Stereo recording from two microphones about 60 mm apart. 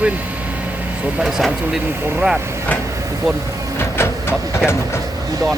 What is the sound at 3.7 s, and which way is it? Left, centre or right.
Printer, left.